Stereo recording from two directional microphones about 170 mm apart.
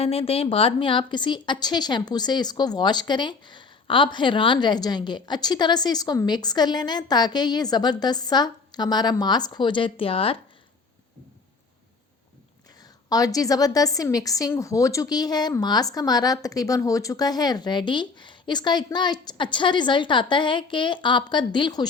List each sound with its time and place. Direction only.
0.0 s a woman's voice: 35° left (ahead or behind)
13.1 s a woman's voice: 20° left (ahead or behind)